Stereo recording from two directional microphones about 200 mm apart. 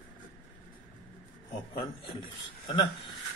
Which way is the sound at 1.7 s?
25° left (ahead or behind).